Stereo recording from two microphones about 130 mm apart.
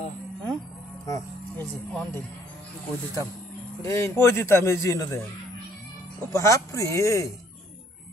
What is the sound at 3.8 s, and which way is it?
Speech, 20° left (ahead or behind).